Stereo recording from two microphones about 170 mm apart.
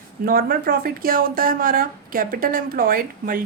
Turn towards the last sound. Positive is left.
turn(degrees=-55)  # may be behind; listen again after turning